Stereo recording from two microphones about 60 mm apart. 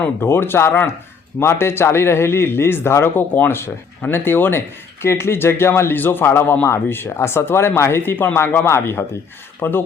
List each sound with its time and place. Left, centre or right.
0.2 s a man's voice: left
8.1 s a man's voice: left